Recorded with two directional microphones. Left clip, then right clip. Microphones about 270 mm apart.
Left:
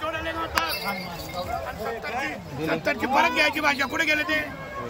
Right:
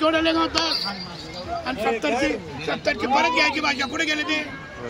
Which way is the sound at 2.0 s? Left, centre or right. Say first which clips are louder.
Right 5 dB; right.